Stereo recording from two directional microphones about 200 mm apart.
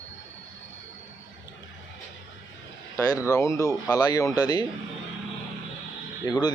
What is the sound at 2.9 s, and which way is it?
Speech, 15° left (ahead or behind).